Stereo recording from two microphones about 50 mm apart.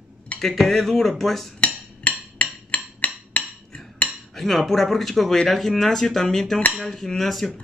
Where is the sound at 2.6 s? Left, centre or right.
Left.